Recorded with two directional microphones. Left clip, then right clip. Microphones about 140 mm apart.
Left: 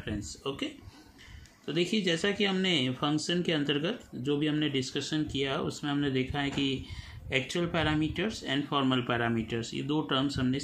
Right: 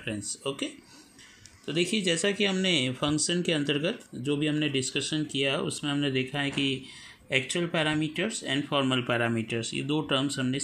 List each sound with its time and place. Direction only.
0.0 s speech: 35° right (ahead or behind)
1.7 s speech: 30° right (ahead or behind)